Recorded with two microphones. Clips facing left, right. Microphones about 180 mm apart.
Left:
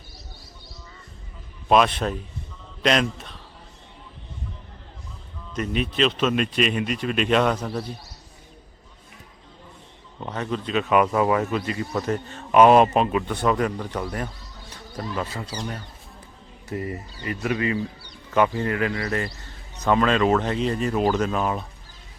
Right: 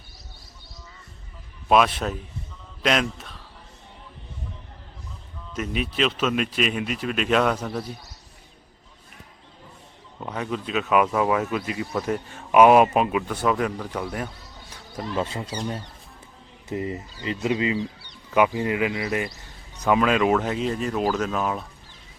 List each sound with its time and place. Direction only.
1.7 s speech: 5° right (ahead or behind)
5.5 s speech: 5° right (ahead or behind)
10.2 s speech: 5° right (ahead or behind)
15.1 s speech: 25° right (ahead or behind)
16.6 s speech: 20° right (ahead or behind); by 21.7 s centre (ahead or behind)